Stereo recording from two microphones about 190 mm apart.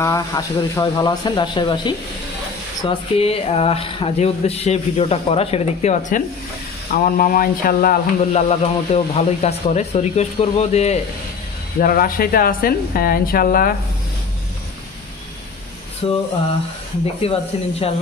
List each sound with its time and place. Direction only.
0.0 s speech: 15° left (ahead or behind); by 8.0 s 50° left (ahead or behind)
8.3 s speech: 35° left (ahead or behind)
11.8 s speech: 50° left (ahead or behind)
16.0 s speech: 30° left (ahead or behind)